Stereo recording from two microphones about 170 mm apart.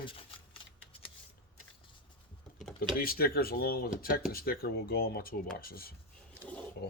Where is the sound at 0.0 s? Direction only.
30° left (ahead or behind).